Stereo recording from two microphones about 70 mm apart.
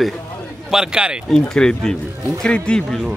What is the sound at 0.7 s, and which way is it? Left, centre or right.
Speech, centre.